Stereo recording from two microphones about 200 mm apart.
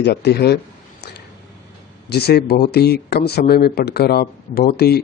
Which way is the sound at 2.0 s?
55° left (ahead or behind).